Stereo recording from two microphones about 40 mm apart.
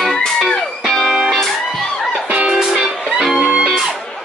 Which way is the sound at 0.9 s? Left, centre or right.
Centre.